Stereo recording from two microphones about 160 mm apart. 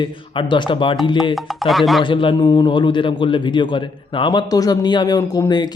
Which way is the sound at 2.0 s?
30° left (ahead or behind).